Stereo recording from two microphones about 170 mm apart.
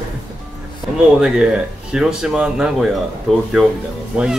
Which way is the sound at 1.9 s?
5° right (ahead or behind).